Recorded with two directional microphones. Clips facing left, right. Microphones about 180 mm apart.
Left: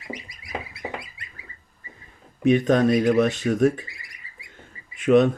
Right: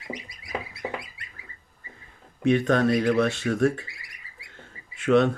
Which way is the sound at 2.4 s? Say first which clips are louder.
Left 3 dB; 20° left (ahead or behind).